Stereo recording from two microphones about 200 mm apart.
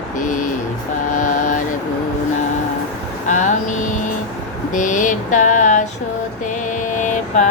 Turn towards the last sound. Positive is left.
turn(degrees=40)  # may be behind; listen again after turning